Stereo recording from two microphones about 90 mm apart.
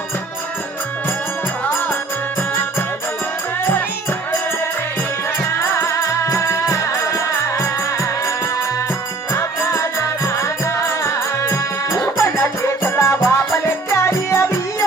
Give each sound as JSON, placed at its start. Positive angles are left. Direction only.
{"t": 5.5, "sound": "music", "side_deg": 30}
{"t": 9.3, "sound": "music", "side_deg": 30}